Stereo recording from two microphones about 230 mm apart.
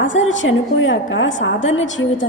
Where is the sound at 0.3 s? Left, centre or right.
Left.